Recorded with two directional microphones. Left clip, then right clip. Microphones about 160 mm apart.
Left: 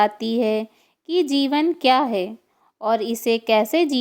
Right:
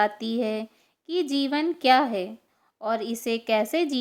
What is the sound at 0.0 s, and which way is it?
A woman's voice, 30° left (ahead or behind).